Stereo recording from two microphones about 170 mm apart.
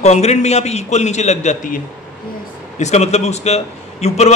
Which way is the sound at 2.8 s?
40° left (ahead or behind).